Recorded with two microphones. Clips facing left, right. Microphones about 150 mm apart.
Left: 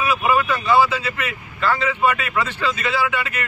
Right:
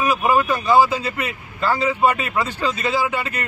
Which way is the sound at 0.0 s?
40° right (ahead or behind).